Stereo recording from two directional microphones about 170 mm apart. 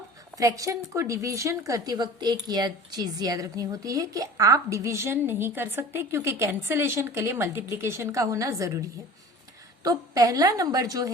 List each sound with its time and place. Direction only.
0.3 s a woman's voice: 20° right (ahead or behind)
9.8 s a woman's voice: 20° right (ahead or behind)